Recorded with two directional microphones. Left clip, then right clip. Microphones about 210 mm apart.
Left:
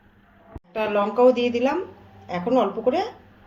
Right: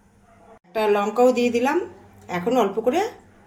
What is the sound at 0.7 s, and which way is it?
Speech, 50° right (ahead or behind).